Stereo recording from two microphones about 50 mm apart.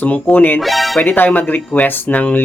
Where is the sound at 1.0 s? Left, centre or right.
Left.